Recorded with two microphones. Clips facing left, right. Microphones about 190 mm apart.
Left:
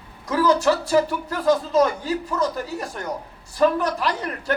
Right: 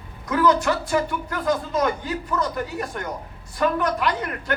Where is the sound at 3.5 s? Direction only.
30° left (ahead or behind).